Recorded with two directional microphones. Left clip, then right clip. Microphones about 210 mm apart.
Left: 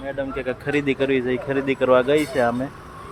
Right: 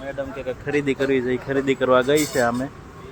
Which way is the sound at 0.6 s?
15° left (ahead or behind).